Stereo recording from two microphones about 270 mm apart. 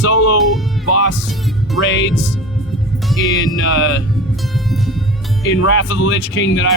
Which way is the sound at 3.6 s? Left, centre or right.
Left.